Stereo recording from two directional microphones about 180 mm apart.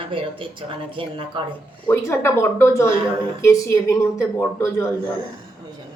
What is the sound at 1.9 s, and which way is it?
A woman's voice, 15° left (ahead or behind).